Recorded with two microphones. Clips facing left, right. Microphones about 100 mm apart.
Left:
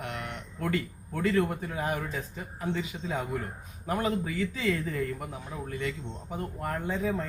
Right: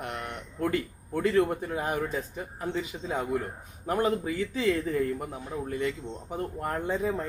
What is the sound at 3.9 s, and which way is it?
Speech, 30° right (ahead or behind).